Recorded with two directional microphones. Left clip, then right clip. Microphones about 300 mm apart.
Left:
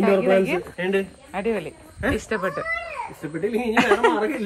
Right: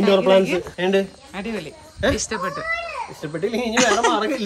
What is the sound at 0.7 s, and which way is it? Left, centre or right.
Speech, right.